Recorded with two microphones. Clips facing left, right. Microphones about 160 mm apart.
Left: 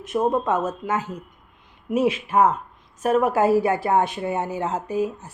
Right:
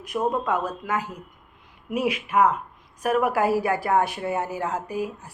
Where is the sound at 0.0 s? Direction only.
25° left (ahead or behind).